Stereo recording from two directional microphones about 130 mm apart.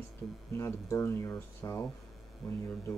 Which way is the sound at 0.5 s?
25° left (ahead or behind).